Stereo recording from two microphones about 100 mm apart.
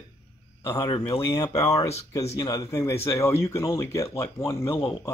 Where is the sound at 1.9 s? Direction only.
90° left.